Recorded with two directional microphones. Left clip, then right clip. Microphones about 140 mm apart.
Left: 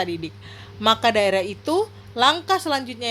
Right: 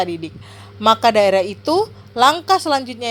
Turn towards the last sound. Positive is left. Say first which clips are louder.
# right 6 dB
turn(degrees=-20)  # may be behind; listen again after turning